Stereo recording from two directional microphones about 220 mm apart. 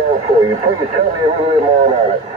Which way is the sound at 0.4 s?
25° right (ahead or behind).